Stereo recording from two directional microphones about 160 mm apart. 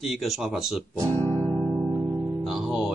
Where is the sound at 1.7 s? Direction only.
15° right (ahead or behind).